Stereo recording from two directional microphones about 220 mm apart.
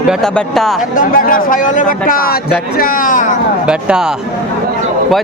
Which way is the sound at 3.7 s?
5° right (ahead or behind).